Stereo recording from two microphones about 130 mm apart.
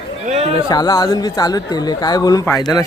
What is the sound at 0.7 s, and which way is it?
Speech, 30° left (ahead or behind).